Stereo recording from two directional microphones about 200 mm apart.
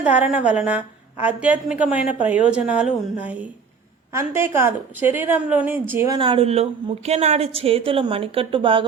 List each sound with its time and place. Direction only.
0.0 s a woman's voice: 5° right (ahead or behind)
6.1 s a woman's voice: 25° right (ahead or behind)